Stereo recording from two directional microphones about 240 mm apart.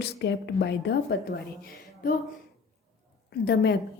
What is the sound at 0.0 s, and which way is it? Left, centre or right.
A woman's voice, left.